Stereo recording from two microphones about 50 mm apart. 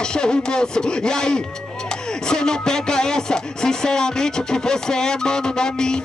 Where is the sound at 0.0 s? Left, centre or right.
Centre.